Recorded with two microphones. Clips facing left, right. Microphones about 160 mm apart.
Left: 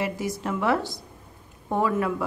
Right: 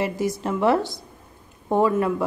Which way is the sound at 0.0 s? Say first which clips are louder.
Right 4 dB; 25° right (ahead or behind).